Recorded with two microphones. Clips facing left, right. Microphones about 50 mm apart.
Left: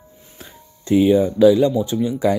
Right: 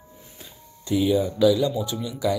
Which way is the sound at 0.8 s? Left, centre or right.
Left.